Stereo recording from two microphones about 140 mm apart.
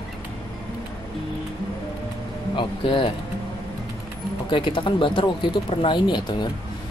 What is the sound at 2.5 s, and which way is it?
Speech, 35° left (ahead or behind).